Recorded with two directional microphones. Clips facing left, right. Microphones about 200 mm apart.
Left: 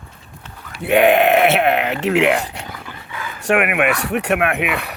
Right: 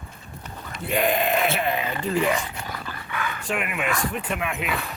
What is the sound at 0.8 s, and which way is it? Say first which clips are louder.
Speech: left 10 dB; 65° left (ahead or behind).